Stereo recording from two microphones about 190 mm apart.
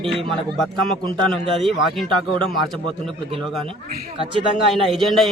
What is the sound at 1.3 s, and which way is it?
Speech, centre (ahead or behind).